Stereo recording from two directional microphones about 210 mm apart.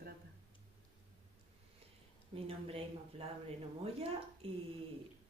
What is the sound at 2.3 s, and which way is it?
Speech, 25° right (ahead or behind).